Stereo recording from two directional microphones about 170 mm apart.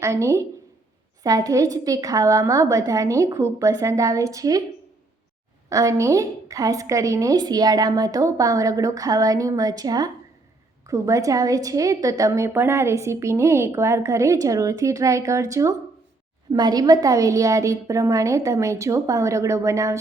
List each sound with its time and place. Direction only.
0.0 s a woman's voice: 15° right (ahead or behind)
5.6 s a woman's voice: 20° right (ahead or behind)